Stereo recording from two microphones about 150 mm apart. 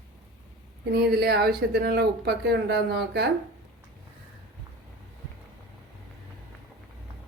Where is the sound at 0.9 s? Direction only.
90° right.